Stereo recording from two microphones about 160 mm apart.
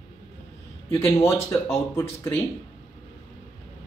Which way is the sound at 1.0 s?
20° left (ahead or behind).